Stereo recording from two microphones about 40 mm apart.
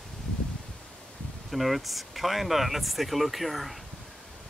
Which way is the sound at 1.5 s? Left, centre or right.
Centre.